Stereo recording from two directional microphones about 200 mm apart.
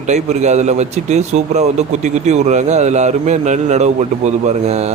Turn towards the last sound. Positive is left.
turn(degrees=-35)  # may be behind; listen again after turning